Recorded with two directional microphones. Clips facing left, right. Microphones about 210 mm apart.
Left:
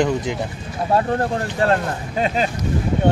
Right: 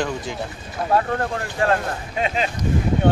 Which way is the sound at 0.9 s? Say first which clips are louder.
Left 2 dB; 30° left (ahead or behind).